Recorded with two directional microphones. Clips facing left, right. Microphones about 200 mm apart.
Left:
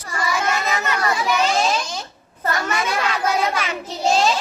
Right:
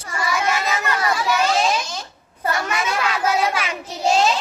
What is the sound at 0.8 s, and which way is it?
Children playing, 20° left (ahead or behind).